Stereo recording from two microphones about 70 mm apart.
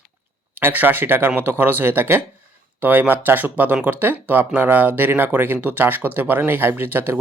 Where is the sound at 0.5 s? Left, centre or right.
Right.